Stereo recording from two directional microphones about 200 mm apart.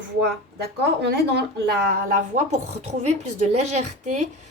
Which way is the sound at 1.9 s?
40° right (ahead or behind).